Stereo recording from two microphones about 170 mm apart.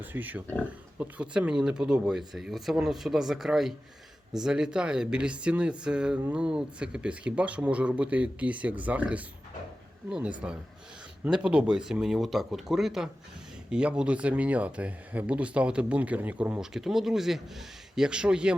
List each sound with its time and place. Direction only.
0.0 s speech: 10° right (ahead or behind)
0.4 s speech: 10° left (ahead or behind)
0.9 s speech: 5° right (ahead or behind)